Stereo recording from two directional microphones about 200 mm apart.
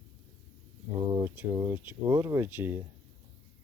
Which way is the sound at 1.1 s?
15° right (ahead or behind).